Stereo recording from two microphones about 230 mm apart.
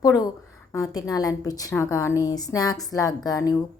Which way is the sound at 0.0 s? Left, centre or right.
Centre.